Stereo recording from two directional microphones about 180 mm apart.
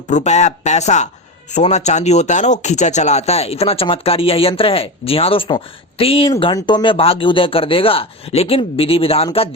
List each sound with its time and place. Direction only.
0.1 s speech: 40° left (ahead or behind)